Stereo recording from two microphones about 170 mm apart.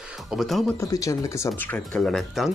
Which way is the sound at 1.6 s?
5° left (ahead or behind).